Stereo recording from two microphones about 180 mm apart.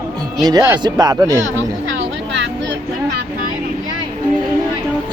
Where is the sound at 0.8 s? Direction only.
20° right (ahead or behind).